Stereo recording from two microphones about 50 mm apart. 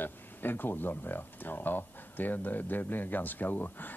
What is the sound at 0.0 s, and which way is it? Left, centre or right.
Speech, left.